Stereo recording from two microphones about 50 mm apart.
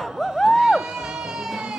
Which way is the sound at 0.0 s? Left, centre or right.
Centre.